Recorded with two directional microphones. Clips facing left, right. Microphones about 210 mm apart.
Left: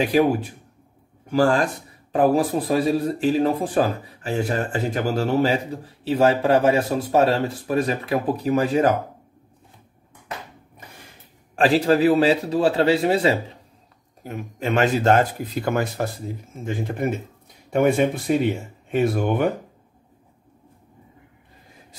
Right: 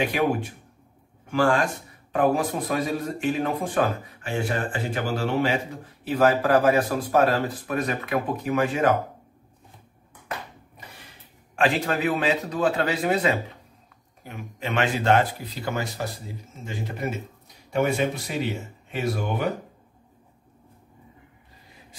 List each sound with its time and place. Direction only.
0.0 s a man's voice: 35° left (ahead or behind)
6.0 s speech: 25° left (ahead or behind)
11.5 s a man's voice: 35° left (ahead or behind)
14.2 s speech: 45° left (ahead or behind)